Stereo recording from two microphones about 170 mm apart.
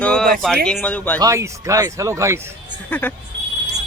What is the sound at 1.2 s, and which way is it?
Speech, 20° right (ahead or behind).